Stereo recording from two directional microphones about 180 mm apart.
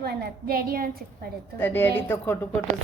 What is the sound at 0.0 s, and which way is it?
A woman's voice, 60° right (ahead or behind).